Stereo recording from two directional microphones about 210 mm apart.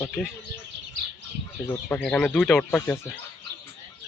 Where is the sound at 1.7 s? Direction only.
5° left (ahead or behind).